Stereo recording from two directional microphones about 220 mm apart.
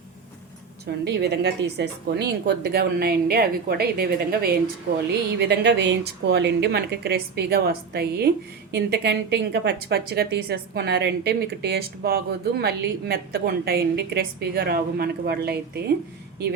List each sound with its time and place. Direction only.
0.9 s a woman's voice: 50° right (ahead or behind)